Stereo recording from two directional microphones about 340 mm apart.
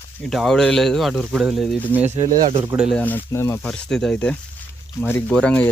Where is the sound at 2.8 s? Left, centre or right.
Centre.